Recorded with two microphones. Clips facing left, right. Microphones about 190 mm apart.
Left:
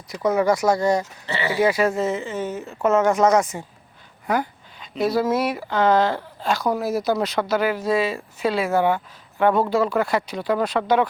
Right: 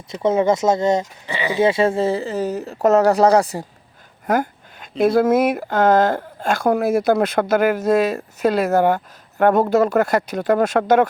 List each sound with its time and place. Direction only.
0.1 s speech: 25° right (ahead or behind)
4.3 s speech: 50° right (ahead or behind)